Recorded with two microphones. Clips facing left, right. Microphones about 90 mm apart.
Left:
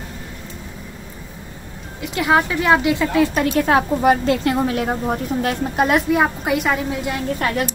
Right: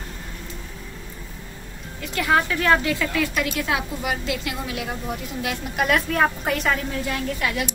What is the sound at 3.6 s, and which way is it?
A woman's voice, 40° left (ahead or behind).